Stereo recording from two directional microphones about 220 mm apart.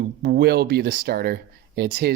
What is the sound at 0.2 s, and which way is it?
Speech, 45° right (ahead or behind).